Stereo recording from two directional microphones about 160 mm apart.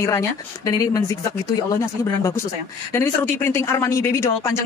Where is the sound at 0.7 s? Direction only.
20° left (ahead or behind).